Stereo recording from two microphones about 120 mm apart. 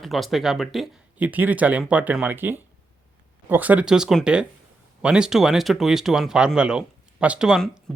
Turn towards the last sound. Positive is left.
turn(degrees=-10)  # may be behind; listen again after turning